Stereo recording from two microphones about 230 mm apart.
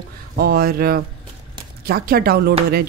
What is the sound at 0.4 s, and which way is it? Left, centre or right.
Speech, right.